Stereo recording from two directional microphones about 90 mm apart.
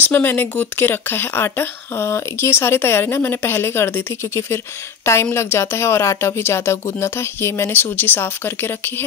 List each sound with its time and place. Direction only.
0.0 s speech: 20° left (ahead or behind)